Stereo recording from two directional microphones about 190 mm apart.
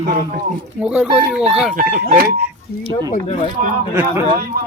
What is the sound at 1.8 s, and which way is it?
Speech, 50° right (ahead or behind).